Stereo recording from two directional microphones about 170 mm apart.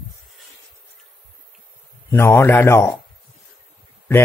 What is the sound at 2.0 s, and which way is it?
Speech, 15° left (ahead or behind).